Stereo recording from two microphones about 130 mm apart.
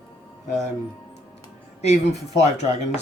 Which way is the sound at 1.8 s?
55° left (ahead or behind).